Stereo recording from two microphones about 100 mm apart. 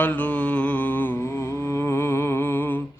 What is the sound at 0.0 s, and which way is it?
Mantra, 15° left (ahead or behind).